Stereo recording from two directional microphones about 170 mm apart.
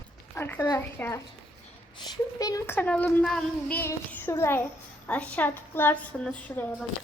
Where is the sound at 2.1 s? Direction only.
20° left (ahead or behind).